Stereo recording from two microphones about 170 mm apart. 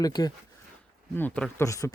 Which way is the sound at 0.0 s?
20° left (ahead or behind).